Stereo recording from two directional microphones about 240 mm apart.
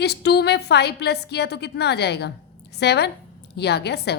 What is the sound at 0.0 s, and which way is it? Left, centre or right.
A woman's voice, left.